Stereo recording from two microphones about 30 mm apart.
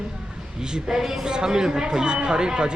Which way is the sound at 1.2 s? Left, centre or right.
Right.